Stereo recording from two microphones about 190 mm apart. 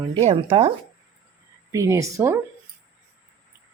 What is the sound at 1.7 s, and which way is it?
Speech, 15° right (ahead or behind).